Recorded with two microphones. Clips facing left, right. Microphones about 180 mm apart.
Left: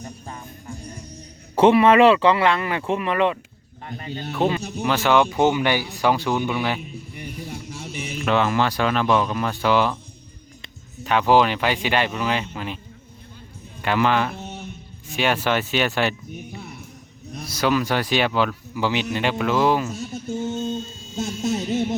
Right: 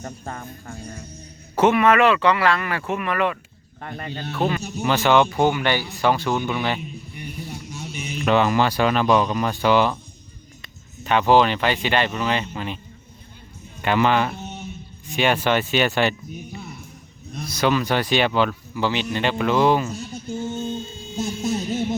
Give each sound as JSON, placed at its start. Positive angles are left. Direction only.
{"t": 0.0, "sound": "music", "side_deg": -60}
{"t": 1.5, "sound": "speech", "side_deg": 30}
{"t": 3.8, "sound": "speech", "side_deg": -60}
{"t": 4.3, "sound": "speech", "side_deg": 20}
{"t": 4.8, "sound": "speech", "side_deg": 0}
{"t": 8.2, "sound": "speech", "side_deg": -5}
{"t": 11.0, "sound": "speech", "side_deg": 0}
{"t": 13.8, "sound": "speech", "side_deg": 0}
{"t": 20.0, "sound": "speech", "side_deg": 20}